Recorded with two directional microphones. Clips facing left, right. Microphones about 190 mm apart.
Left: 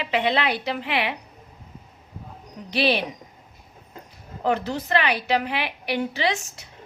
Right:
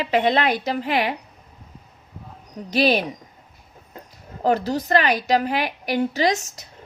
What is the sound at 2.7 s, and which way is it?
Speech, 40° right (ahead or behind).